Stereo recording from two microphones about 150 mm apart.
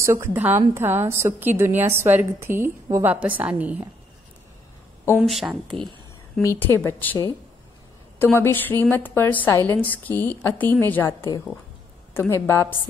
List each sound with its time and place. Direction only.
0.0 s a woman's voice: 20° right (ahead or behind)
5.2 s speech: centre (ahead or behind)
6.4 s a woman's voice: 20° left (ahead or behind)